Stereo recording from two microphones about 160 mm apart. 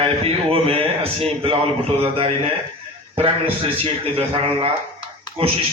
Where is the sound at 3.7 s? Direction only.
35° right (ahead or behind).